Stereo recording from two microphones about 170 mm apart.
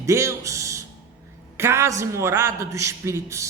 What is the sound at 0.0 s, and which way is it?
A man's voice, 15° right (ahead or behind).